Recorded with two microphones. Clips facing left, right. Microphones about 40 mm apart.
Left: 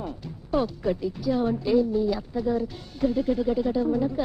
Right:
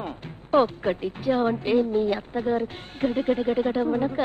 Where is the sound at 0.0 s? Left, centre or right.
Right.